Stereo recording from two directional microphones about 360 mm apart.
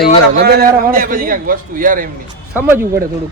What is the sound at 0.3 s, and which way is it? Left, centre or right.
A man's voice, right.